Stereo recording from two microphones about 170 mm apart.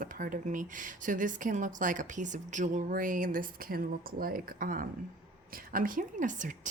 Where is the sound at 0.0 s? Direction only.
55° right (ahead or behind).